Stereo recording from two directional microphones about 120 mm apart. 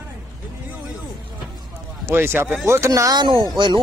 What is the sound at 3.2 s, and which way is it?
Speech, 40° right (ahead or behind).